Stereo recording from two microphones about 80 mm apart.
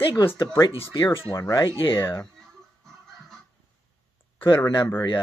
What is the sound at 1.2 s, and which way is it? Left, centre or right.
Speech, left.